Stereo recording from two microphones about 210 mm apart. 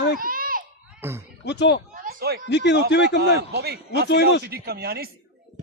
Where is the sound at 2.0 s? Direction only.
45° right (ahead or behind).